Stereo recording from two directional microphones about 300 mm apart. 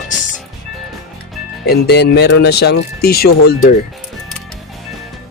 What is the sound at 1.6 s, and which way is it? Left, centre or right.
Speech, left.